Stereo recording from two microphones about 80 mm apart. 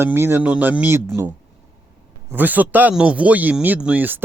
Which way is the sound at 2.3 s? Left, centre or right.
Right.